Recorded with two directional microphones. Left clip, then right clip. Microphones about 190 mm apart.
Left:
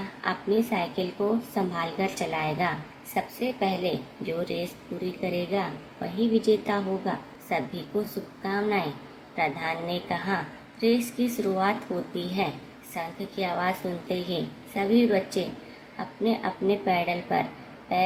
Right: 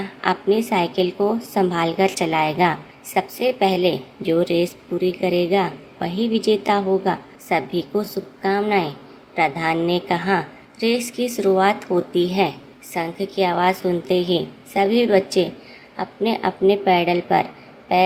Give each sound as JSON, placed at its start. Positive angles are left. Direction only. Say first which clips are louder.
{"t": 0.2, "sound": "a woman's voice", "louder": "right 7 dB", "side_deg": -55}